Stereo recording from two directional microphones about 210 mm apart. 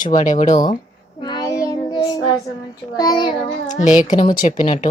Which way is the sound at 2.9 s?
20° left (ahead or behind).